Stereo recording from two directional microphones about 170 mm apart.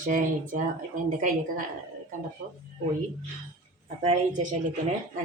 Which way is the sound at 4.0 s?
45° right (ahead or behind).